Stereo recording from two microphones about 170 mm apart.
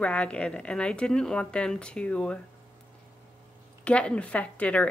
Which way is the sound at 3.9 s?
5° left (ahead or behind).